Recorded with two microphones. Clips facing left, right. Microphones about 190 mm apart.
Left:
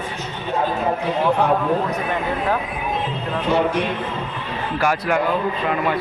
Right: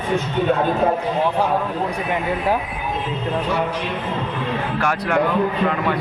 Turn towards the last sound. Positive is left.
turn(degrees=5)  # may be behind; listen again after turning